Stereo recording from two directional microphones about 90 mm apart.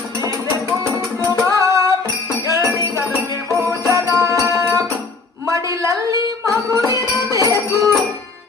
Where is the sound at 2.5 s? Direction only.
35° right (ahead or behind).